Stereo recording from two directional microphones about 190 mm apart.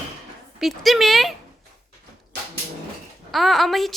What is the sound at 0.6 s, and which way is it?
Speech, centre (ahead or behind).